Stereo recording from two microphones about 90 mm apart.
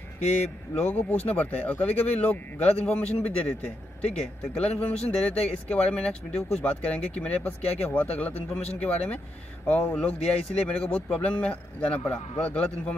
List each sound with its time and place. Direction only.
0.8 s speech: 20° left (ahead or behind)